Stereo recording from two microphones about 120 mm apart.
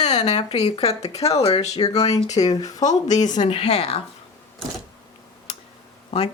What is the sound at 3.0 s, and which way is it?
Speech, 90° left.